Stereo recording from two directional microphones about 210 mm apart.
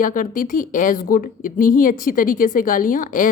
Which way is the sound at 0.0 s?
40° left (ahead or behind).